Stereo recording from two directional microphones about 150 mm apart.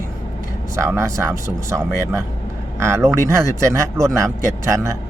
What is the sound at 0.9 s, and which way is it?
Speech, 20° right (ahead or behind).